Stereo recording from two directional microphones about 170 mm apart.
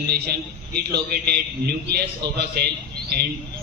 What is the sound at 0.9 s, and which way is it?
A man's voice, 65° right (ahead or behind).